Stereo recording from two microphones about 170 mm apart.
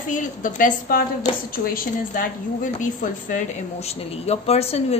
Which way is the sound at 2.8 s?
50° left (ahead or behind).